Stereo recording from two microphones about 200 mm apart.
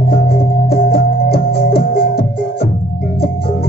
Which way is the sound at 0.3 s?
50° left (ahead or behind).